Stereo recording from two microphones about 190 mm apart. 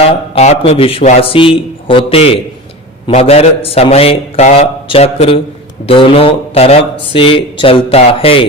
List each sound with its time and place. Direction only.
0.0 s a man's voice: 30° left (ahead or behind)